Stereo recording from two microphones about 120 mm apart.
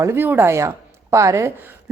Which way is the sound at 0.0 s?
20° right (ahead or behind).